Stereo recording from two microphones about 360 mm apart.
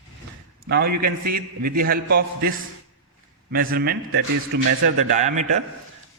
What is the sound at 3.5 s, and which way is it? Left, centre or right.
A man's voice, right.